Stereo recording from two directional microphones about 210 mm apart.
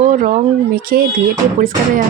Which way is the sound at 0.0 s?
35° right (ahead or behind).